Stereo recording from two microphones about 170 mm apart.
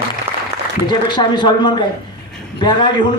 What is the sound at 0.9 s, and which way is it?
A man's voice, 25° left (ahead or behind).